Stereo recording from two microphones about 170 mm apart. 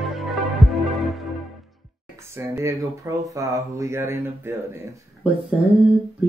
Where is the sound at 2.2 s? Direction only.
15° right (ahead or behind).